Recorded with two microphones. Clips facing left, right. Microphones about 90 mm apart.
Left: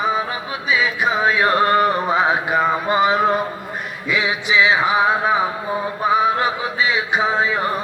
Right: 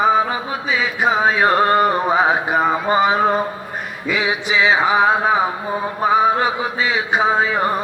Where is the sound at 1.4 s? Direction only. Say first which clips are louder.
Even; 25° right (ahead or behind).